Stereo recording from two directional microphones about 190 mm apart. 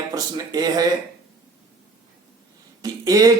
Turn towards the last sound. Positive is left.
turn(degrees=-20)  # may be behind; listen again after turning